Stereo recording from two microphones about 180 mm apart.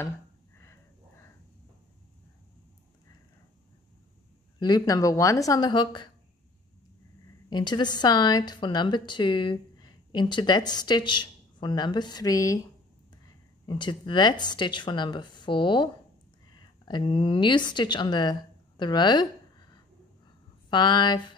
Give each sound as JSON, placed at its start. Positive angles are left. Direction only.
{"t": 4.6, "sound": "a woman's voice", "side_deg": 25}
{"t": 7.4, "sound": "a woman's voice", "side_deg": 25}
{"t": 13.7, "sound": "a woman's voice", "side_deg": 25}
{"t": 20.7, "sound": "a woman's voice", "side_deg": 25}